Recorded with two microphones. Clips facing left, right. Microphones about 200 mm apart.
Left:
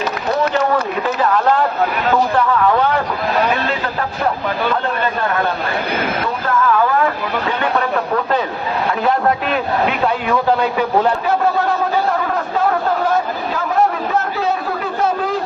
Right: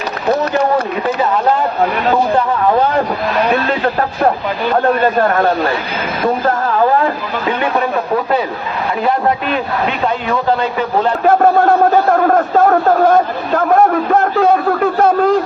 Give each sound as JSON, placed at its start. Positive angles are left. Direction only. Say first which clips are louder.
{"t": 2.3, "sound": "speech", "louder": "right 2 dB", "side_deg": -30}
{"t": 6.2, "sound": "speech", "louder": "right 6 dB", "side_deg": -35}
{"t": 7.6, "sound": "speech", "louder": "right 2 dB", "side_deg": -15}
{"t": 9.0, "sound": "a man's voice", "louder": "right 2 dB", "side_deg": 0}
{"t": 11.3, "sound": "a sound", "louder": "right 6 dB", "side_deg": -50}